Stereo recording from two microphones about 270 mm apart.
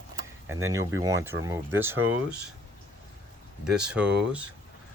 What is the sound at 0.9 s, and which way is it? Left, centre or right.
Speech, centre.